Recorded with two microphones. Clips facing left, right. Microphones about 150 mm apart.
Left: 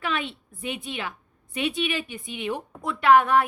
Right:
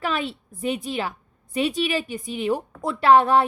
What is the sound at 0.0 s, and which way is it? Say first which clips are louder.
A woman's voice: right 3 dB; 40° right (ahead or behind).